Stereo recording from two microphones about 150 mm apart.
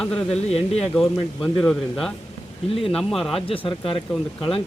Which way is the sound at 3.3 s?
40° left (ahead or behind).